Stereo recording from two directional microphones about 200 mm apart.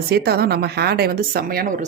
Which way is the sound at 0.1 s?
50° right (ahead or behind).